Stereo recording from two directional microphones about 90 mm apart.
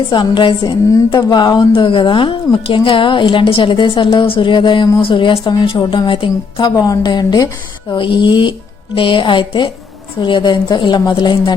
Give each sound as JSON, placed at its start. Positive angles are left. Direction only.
{"t": 0.1, "sound": "a woman's voice", "side_deg": 60}
{"t": 4.9, "sound": "speech", "side_deg": 75}
{"t": 5.5, "sound": "a woman's voice", "side_deg": 60}
{"t": 6.7, "sound": "a woman's voice", "side_deg": 45}
{"t": 7.9, "sound": "a woman's voice", "side_deg": 65}